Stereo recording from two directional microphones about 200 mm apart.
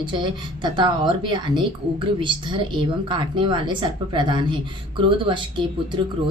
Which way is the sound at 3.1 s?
25° right (ahead or behind).